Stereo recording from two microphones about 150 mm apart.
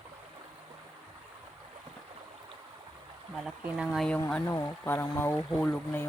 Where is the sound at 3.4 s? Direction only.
5° right (ahead or behind).